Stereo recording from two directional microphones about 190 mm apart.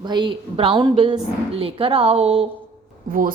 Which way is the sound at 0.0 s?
25° right (ahead or behind).